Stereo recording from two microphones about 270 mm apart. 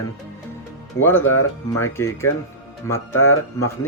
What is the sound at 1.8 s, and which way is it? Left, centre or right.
Speech, centre.